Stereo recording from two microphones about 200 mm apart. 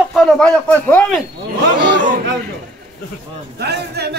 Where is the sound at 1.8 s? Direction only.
60° right (ahead or behind).